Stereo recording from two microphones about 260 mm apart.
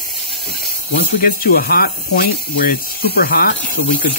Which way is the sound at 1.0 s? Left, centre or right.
Left.